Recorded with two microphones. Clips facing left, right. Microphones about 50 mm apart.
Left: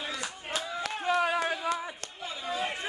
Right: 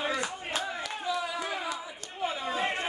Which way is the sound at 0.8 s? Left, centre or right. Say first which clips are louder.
Left 4 dB; left.